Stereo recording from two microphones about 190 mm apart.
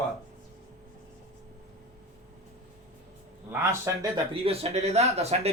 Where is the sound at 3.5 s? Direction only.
15° right (ahead or behind).